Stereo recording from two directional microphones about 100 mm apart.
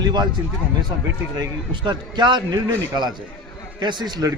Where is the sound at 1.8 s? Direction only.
50° right (ahead or behind).